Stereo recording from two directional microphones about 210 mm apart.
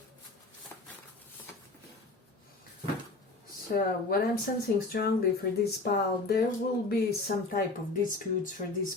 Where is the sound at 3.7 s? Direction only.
45° left (ahead or behind).